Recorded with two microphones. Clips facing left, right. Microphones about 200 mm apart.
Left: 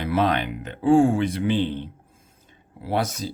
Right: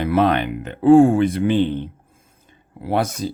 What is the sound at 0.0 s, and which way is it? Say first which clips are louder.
Speech: right 5 dB; 55° right (ahead or behind).